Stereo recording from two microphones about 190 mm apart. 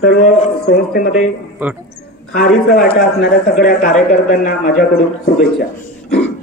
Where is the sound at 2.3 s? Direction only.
50° left (ahead or behind).